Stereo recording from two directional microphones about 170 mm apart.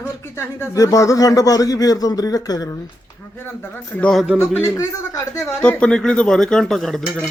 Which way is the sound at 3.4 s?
10° left (ahead or behind).